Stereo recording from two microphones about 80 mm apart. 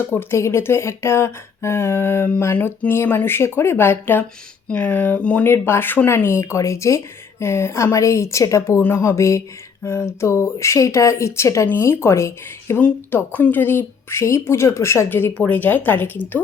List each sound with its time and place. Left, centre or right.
0.0 s speech: left
5.5 s speech: left
8.8 s speech: left
12.7 s speech: left
15.4 s speech: centre